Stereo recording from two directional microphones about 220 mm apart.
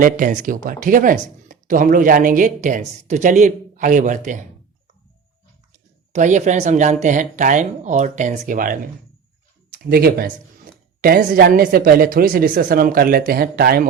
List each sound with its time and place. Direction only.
0.0 s speech: 40° right (ahead or behind)
6.1 s speech: 35° right (ahead or behind)